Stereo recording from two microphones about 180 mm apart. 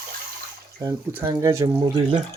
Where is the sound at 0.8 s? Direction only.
15° right (ahead or behind).